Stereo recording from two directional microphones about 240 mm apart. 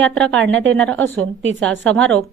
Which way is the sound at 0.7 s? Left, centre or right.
Centre.